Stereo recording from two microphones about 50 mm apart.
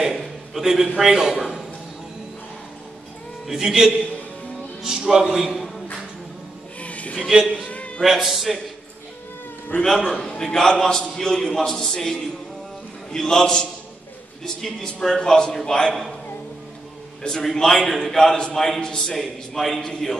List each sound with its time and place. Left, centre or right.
0.0 s a sound: centre
0.9 s a man's voice: centre
3.4 s a man's voice: centre
6.8 s a sound: left
8.0 s a man's voice: centre
9.8 s a man's voice: centre
10.4 s a man's voice: centre
17.4 s a man's voice: centre
19.1 s a man's voice: centre